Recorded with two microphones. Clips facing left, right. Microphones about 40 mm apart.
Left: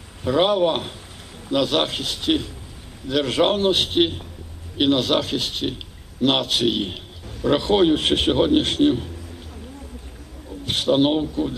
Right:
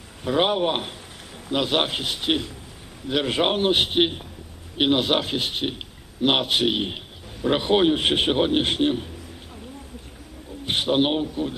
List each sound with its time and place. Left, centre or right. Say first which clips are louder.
0.3 s a man's voice: left 3 dB; centre
10.7 s a man's voice: left 3 dB; centre